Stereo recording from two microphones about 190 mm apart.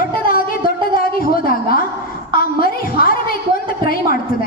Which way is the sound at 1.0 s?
50° left (ahead or behind).